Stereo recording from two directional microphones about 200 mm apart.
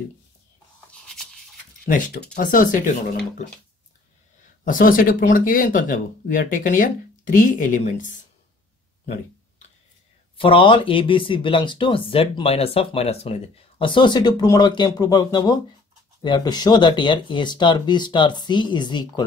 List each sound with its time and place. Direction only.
0.9 s a sound: 5° left (ahead or behind)
2.3 s speech: 45° left (ahead or behind)
4.6 s speech: 45° left (ahead or behind)
10.3 s speech: 25° left (ahead or behind)